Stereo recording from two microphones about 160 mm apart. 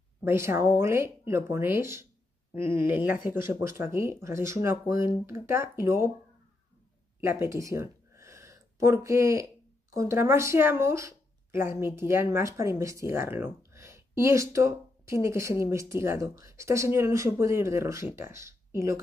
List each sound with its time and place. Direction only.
0.2 s speech: 15° right (ahead or behind)
7.2 s speech: 15° right (ahead or behind)